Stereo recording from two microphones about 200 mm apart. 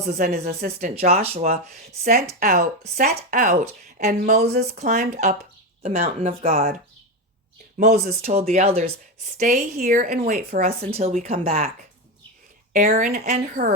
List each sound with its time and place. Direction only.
0.0 s a woman's voice: 35° right (ahead or behind)
0.3 s a woman's voice: 45° right (ahead or behind)
4.6 s a woman's voice: 40° right (ahead or behind)
7.8 s a woman's voice: 35° right (ahead or behind)